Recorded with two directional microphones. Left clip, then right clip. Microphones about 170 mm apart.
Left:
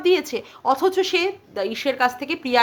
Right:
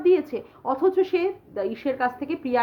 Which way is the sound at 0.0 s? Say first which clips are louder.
Left 1 dB; 20° left (ahead or behind).